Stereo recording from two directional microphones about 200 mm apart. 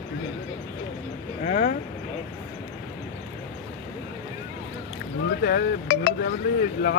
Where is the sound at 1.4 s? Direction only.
45° left (ahead or behind).